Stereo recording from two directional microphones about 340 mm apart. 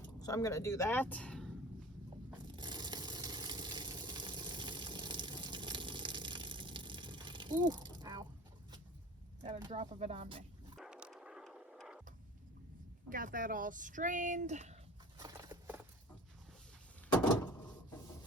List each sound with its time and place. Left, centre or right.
0.2 s speech: centre
2.3 s a sound: centre
9.4 s speech: centre
10.8 s a sound: centre
13.1 s speech: right
15.2 s patter: centre